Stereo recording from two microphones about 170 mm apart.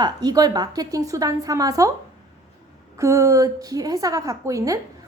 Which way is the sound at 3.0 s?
20° right (ahead or behind).